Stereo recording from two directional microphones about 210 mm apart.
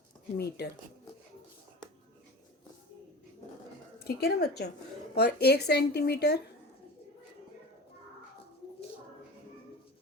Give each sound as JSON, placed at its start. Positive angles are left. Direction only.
{"t": 0.3, "sound": "speech", "side_deg": 50}
{"t": 4.0, "sound": "speech", "side_deg": 50}